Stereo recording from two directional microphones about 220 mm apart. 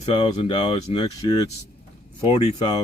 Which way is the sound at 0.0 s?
25° left (ahead or behind).